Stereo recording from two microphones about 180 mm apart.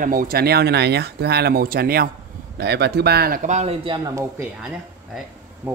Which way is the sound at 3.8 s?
25° right (ahead or behind).